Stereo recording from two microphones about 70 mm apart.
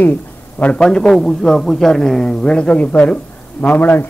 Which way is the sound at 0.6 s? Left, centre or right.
Centre.